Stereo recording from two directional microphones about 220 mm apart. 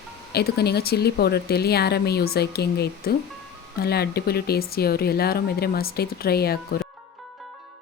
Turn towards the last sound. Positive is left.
turn(degrees=45)  # may be behind; listen again after turning